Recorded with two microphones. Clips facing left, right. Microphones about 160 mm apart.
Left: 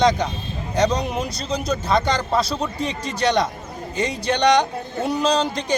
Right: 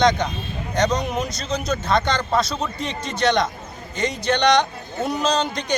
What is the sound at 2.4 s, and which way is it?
Speech, 35° left (ahead or behind).